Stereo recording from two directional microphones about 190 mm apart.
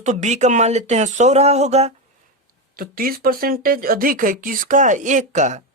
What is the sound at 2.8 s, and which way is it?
Speech, 50° right (ahead or behind).